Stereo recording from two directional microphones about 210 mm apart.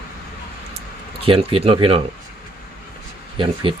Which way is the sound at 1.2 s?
25° right (ahead or behind).